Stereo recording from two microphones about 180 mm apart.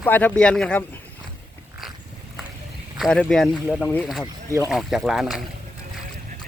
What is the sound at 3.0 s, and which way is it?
Speech, 5° left (ahead or behind).